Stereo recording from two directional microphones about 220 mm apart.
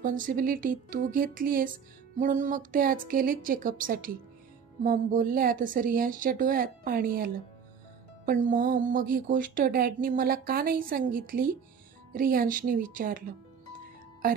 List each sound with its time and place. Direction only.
0.0 s speech: 35° right (ahead or behind)